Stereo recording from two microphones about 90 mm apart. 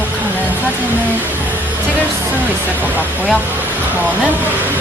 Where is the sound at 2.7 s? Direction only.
20° right (ahead or behind).